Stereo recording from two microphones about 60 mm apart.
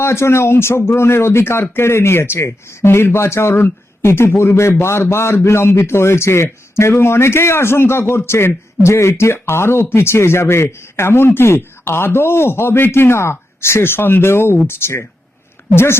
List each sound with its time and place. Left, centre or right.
0.0 s a man's voice: left